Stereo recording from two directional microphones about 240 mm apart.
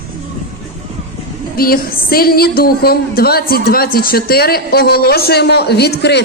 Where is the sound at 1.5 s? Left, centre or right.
Left.